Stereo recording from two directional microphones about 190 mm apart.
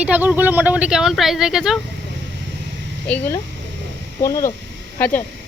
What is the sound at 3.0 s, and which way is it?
Speech, 10° left (ahead or behind).